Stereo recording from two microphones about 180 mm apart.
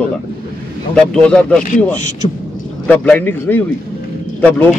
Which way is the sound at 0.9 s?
5° left (ahead or behind).